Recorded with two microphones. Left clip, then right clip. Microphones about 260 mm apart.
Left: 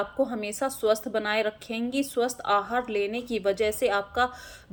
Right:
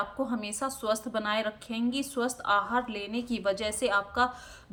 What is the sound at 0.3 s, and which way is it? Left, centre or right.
Speech, centre.